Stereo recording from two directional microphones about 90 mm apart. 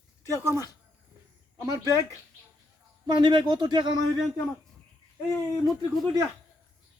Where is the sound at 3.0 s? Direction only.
60° right (ahead or behind).